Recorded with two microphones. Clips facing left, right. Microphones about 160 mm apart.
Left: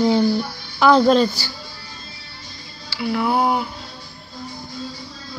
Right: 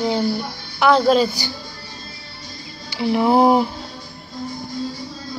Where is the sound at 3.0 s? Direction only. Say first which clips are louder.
Right 5 dB; 25° right (ahead or behind).